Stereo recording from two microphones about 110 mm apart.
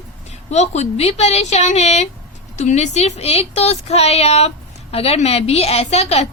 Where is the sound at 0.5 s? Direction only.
90° left.